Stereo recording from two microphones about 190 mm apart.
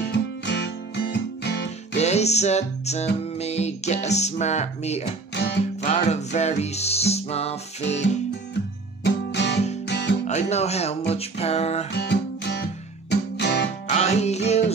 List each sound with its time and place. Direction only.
0.1 s music: 65° left (ahead or behind)
2.0 s music: 35° left (ahead or behind)
5.3 s music: 60° left (ahead or behind)
5.8 s music: 35° left (ahead or behind)
9.0 s guitar: 60° left (ahead or behind)
9.8 s music: 60° left (ahead or behind)
10.2 s speech: 35° left (ahead or behind)
11.1 s music: 35° left (ahead or behind)
11.9 s music: 60° left (ahead or behind)
13.8 s music: 35° left (ahead or behind)